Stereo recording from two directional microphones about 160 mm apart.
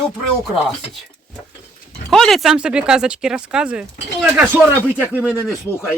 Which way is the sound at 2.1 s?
Centre (ahead or behind).